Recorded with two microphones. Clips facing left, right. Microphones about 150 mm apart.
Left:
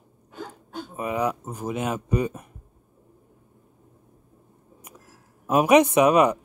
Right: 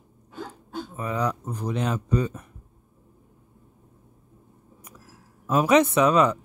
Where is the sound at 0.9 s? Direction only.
15° left (ahead or behind).